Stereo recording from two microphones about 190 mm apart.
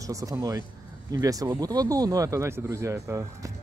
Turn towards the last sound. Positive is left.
turn(degrees=-15)  # may be behind; listen again after turning